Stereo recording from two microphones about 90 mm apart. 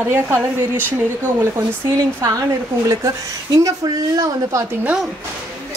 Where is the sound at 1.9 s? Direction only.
40° right (ahead or behind).